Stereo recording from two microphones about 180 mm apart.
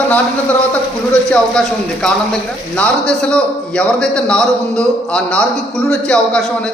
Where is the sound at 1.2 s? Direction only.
5° left (ahead or behind).